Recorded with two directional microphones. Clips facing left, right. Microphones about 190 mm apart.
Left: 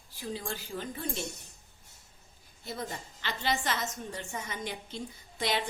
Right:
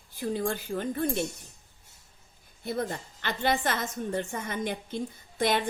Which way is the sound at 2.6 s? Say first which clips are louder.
Right 7 dB; 55° right (ahead or behind).